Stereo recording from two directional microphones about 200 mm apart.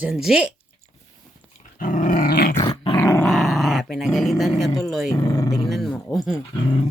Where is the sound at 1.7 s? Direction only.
40° left (ahead or behind).